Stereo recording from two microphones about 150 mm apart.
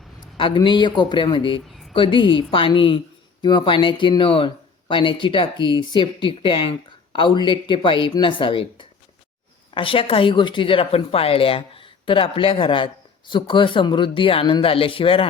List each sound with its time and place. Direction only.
0.3 s speech: 35° left (ahead or behind)